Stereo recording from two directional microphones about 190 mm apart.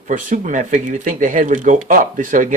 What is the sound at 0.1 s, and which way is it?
Speech, 45° right (ahead or behind).